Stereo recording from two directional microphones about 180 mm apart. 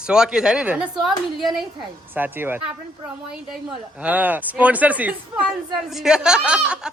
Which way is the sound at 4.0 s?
10° right (ahead or behind).